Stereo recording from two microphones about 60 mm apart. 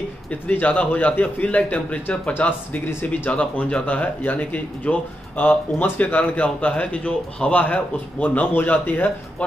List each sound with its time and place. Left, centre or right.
0.3 s speech: left